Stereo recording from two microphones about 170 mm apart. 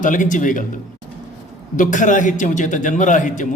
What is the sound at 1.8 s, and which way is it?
A man's voice, 50° left (ahead or behind).